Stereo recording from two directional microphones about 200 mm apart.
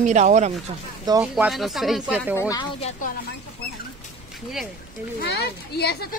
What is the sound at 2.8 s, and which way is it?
Speech, 40° left (ahead or behind).